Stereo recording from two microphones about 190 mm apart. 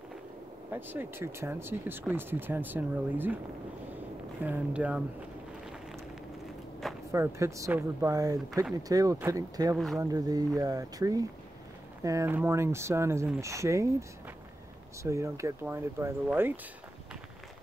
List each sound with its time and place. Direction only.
0.7 s speech: 10° right (ahead or behind)
4.4 s speech: 10° right (ahead or behind)
7.1 s speech: 15° right (ahead or behind)
15.0 s speech: 15° right (ahead or behind)